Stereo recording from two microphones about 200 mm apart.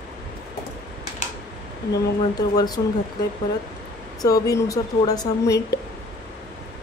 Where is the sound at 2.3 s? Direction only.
20° left (ahead or behind).